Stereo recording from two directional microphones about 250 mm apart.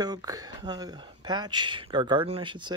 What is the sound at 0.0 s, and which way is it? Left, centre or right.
Speech, centre.